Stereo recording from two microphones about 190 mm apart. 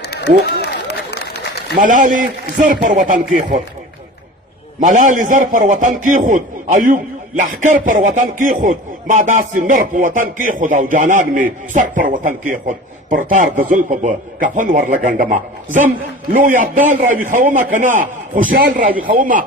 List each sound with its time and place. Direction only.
0.1 s a sound: 60° left (ahead or behind)
1.7 s a man's voice: 45° right (ahead or behind)
4.8 s a man's voice: 40° right (ahead or behind)